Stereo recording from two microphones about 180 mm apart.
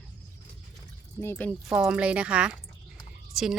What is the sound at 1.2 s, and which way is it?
Speech, 10° left (ahead or behind).